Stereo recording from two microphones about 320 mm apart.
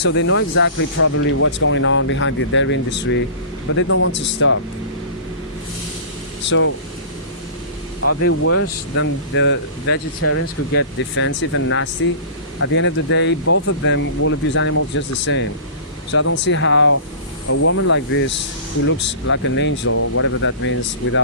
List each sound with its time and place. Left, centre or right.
0.0 s speech: left
6.4 s speech: left
8.0 s speech: left